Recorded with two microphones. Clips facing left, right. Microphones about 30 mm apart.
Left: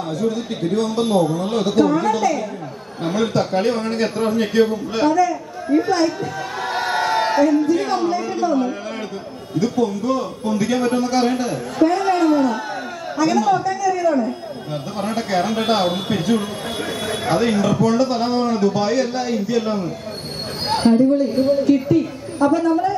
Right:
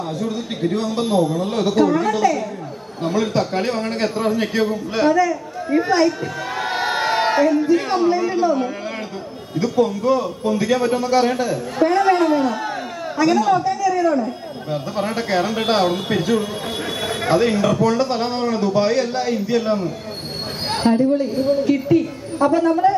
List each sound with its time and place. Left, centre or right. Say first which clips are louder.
0.2 s a woman's voice: left 2 dB; centre
11.9 s a sound: right 4 dB; centre
13.2 s speech: right 1 dB; centre
13.7 s a sound: right 1 dB; centre
14.1 s a woman's voice: left 1 dB; centre
21.8 s speech: right 1 dB; centre